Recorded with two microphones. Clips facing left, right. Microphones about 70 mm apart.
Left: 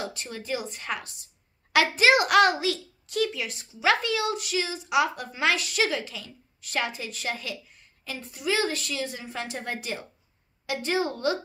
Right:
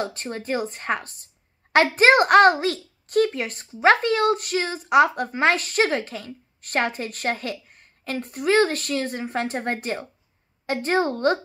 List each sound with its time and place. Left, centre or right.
0.0 s a child's voice: right